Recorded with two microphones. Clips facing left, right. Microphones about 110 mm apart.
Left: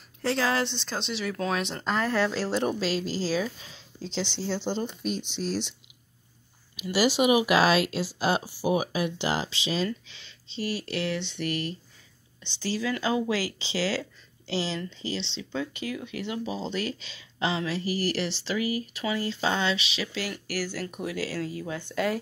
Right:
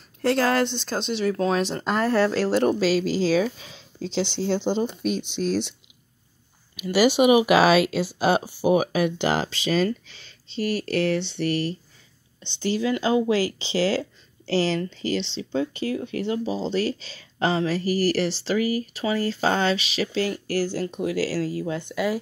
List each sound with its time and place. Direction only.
0.2 s speech: 50° right (ahead or behind)
2.3 s speech: 65° right (ahead or behind)
4.3 s speech: 60° right (ahead or behind)
6.8 s speech: 60° right (ahead or behind); by 11.7 s 35° right (ahead or behind)
12.7 s speech: 25° right (ahead or behind)
14.5 s speech: 50° right (ahead or behind); by 21.5 s 35° right (ahead or behind)
21.7 s speech: 15° right (ahead or behind)